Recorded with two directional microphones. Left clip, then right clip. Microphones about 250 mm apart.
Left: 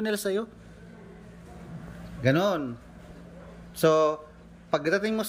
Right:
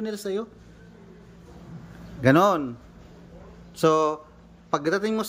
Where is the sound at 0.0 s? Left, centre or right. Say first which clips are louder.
Left 2 dB; centre.